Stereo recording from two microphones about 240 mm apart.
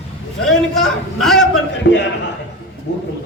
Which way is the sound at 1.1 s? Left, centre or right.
Centre.